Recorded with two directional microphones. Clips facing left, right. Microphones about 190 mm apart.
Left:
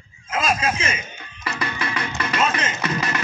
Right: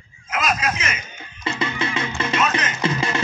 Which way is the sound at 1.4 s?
25° right (ahead or behind).